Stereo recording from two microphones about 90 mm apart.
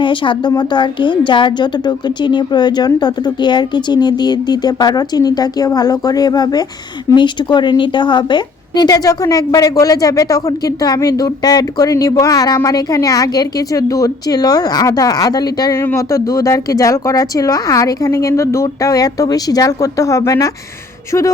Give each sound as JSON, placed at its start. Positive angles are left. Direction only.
{"t": 0.0, "sound": "speech", "side_deg": 65}
{"t": 0.5, "sound": "a woman's voice", "side_deg": 55}
{"t": 15.8, "sound": "speech", "side_deg": 30}